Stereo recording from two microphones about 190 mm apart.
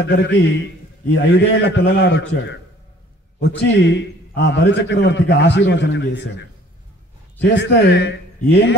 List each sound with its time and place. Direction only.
0.1 s a man's voice: 65° left (ahead or behind)
7.4 s a man's voice: 65° left (ahead or behind)